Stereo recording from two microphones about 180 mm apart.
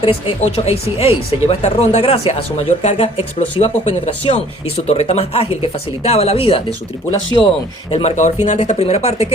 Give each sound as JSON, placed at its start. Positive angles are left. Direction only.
{"t": 0.0, "sound": "speech", "side_deg": 30}
{"t": 7.9, "sound": "speech", "side_deg": 30}
{"t": 8.1, "sound": "speech", "side_deg": 40}